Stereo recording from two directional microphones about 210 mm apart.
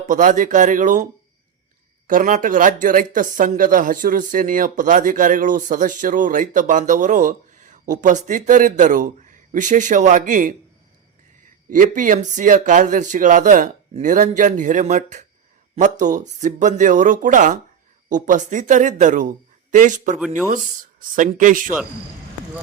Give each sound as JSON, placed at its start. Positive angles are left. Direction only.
{"t": 0.1, "sound": "speech", "side_deg": -40}
{"t": 2.0, "sound": "speech", "side_deg": -40}
{"t": 11.7, "sound": "speech", "side_deg": -40}